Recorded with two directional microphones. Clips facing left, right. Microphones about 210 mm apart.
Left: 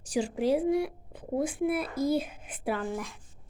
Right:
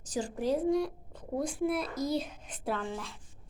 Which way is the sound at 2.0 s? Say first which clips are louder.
Left 7 dB; 55° left (ahead or behind).